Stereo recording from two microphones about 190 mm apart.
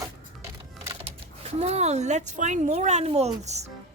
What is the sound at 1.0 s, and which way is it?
Speech, 35° right (ahead or behind).